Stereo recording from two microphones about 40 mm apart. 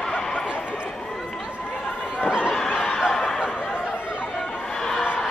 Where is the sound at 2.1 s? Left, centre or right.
Right.